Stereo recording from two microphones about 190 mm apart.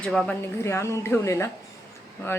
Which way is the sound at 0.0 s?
5° left (ahead or behind).